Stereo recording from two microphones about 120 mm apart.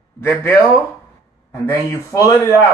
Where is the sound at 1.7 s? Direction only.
25° left (ahead or behind).